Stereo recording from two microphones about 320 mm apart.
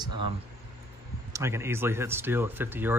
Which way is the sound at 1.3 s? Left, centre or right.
Centre.